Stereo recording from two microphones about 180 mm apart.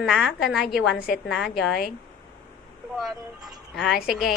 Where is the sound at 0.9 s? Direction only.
55° left (ahead or behind).